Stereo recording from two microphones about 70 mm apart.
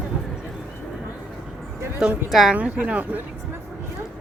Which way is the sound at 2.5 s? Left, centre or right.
Centre.